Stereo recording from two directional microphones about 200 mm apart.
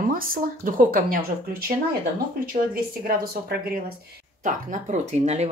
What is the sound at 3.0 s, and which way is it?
Speech, 50° right (ahead or behind).